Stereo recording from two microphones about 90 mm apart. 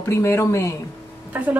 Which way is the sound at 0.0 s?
30° left (ahead or behind).